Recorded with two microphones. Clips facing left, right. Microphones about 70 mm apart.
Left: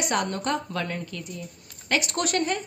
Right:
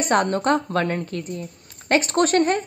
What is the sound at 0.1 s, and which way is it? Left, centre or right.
A woman's voice, right.